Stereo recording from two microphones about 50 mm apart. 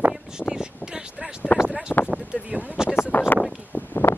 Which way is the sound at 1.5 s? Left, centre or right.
Left.